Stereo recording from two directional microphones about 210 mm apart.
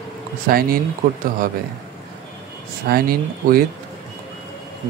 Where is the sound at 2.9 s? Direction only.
45° right (ahead or behind).